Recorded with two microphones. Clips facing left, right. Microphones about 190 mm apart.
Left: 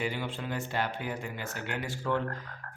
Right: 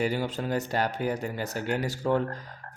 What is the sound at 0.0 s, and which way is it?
Speech, 40° right (ahead or behind).